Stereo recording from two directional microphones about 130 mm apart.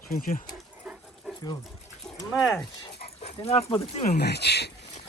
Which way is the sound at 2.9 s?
50° left (ahead or behind).